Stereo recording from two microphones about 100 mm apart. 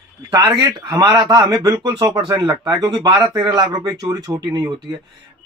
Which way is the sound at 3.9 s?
35° right (ahead or behind).